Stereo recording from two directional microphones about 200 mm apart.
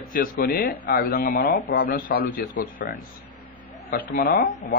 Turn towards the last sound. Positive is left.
turn(degrees=50)  # may be behind; listen again after turning